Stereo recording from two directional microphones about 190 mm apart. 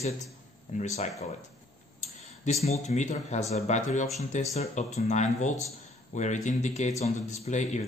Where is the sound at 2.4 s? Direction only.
35° left (ahead or behind).